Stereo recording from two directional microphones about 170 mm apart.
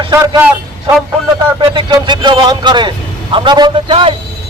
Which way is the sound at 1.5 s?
25° right (ahead or behind).